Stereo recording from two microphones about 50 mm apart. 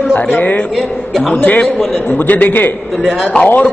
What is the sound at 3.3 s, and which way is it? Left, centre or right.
Speech, left.